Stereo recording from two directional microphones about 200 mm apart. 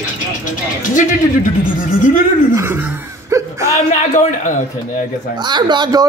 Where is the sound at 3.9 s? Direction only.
35° left (ahead or behind).